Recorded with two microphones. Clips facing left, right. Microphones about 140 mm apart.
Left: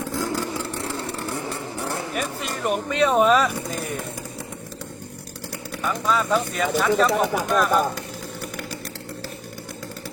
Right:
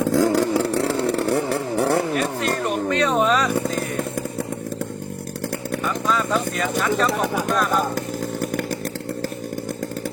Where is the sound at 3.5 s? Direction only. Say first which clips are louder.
Right 7 dB; 50° right (ahead or behind).